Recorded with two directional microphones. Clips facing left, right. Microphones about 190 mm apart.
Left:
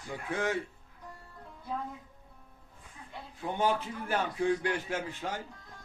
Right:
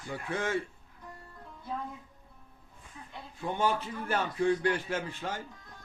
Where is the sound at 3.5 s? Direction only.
15° left (ahead or behind).